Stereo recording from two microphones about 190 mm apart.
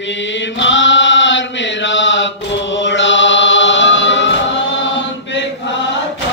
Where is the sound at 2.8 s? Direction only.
75° left (ahead or behind).